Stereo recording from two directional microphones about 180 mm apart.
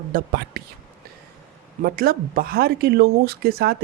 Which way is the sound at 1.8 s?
55° right (ahead or behind).